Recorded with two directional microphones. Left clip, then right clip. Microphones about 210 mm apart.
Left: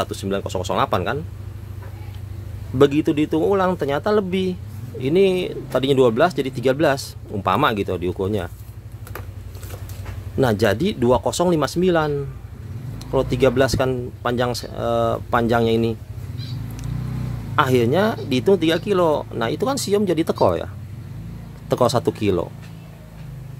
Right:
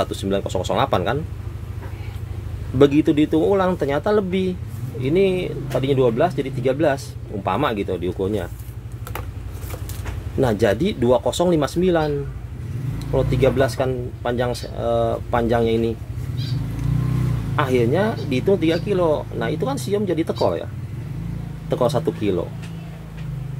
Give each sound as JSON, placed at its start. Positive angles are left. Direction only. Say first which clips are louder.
{"t": 0.0, "sound": "speech", "louder": "right 2 dB", "side_deg": 20}
{"t": 2.8, "sound": "speech", "louder": "right 1 dB", "side_deg": 20}
{"t": 10.4, "sound": "speech", "louder": "even", "side_deg": 25}
{"t": 17.6, "sound": "speech", "louder": "left 2 dB", "side_deg": 30}
{"t": 21.6, "sound": "speech", "louder": "left 2 dB", "side_deg": 35}